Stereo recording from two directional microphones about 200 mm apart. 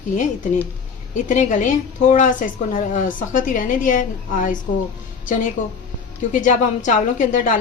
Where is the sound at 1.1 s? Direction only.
40° left (ahead or behind).